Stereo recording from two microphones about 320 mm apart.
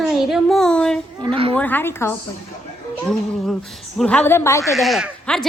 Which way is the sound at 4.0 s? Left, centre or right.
Centre.